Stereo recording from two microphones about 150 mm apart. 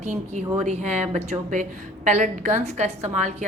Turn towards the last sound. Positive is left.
turn(degrees=-50)  # may be behind; listen again after turning